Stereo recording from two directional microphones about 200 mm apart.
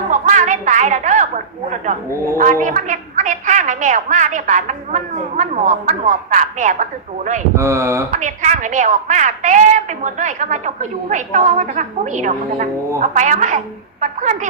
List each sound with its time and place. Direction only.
0.1 s a sound: 35° right (ahead or behind)
2.4 s a woman's voice: 40° right (ahead or behind)
7.5 s speech: 15° right (ahead or behind)
8.1 s a woman's voice: 35° right (ahead or behind)